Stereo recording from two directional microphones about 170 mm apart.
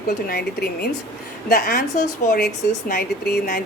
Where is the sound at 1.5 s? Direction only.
50° left (ahead or behind).